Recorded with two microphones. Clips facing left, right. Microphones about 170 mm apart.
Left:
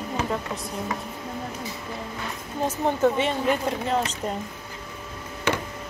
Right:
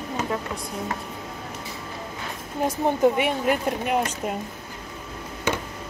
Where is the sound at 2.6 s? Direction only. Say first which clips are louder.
Right 2 dB; 10° right (ahead or behind).